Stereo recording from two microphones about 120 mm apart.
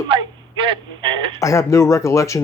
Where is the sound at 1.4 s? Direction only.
25° left (ahead or behind).